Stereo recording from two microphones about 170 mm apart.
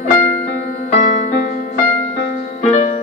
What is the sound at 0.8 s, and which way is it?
Music, 45° left (ahead or behind).